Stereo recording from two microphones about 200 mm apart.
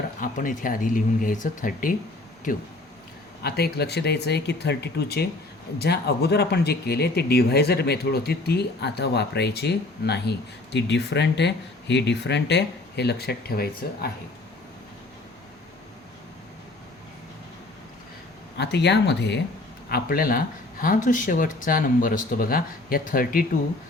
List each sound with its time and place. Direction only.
0.2 s speech: 45° left (ahead or behind)
18.5 s speech: 55° left (ahead or behind)
19.9 s speech: 45° left (ahead or behind)